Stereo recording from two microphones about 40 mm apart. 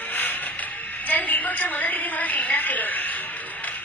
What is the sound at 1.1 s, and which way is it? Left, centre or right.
A woman's voice, left.